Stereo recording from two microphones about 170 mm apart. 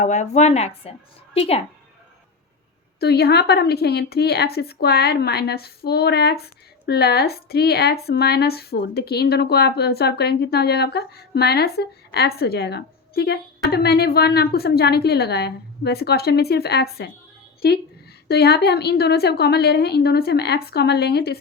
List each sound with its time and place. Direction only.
0.0 s a woman's voice: 45° left (ahead or behind)
3.0 s speech: 70° left (ahead or behind)